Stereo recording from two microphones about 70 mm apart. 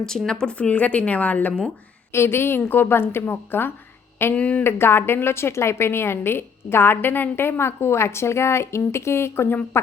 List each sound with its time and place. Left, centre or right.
0.3 s a woman's voice: centre
2.1 s a woman's voice: left
4.4 s a woman's voice: centre
4.6 s a woman's voice: left